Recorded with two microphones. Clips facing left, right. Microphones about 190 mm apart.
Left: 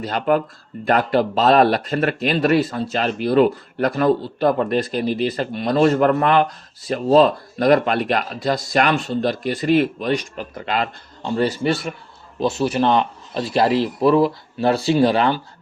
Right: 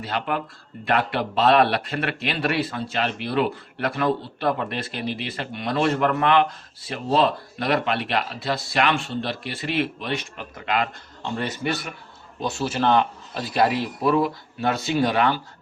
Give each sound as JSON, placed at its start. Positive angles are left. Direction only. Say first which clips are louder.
{"t": 0.0, "sound": "a man's voice", "louder": "left 8 dB", "side_deg": 45}